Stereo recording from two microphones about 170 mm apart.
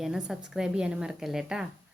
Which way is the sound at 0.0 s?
5° right (ahead or behind).